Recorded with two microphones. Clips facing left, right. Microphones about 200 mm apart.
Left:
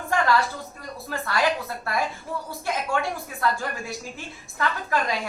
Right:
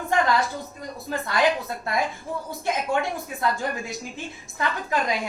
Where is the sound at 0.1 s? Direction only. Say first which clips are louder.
Even; 20° right (ahead or behind).